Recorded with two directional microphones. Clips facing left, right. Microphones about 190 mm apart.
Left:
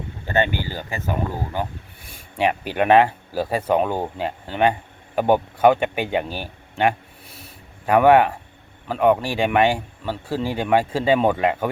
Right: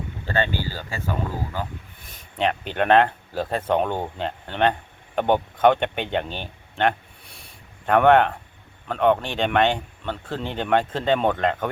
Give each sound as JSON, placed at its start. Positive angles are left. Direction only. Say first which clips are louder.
{"t": 0.3, "sound": "speech", "louder": "left 3 dB", "side_deg": 15}